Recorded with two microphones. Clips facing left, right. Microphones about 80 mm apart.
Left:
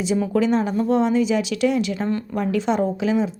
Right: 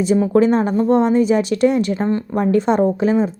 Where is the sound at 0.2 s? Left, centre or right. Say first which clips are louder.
Right 4 dB; right.